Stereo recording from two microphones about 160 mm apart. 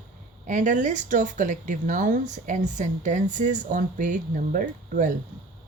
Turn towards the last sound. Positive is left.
turn(degrees=-55)  # may be behind; listen again after turning